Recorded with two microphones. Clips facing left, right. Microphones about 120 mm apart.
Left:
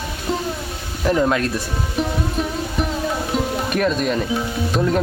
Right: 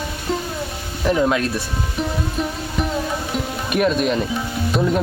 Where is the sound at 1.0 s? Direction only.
5° right (ahead or behind).